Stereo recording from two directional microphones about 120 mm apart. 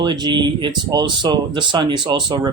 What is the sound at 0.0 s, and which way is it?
Speech, 35° right (ahead or behind).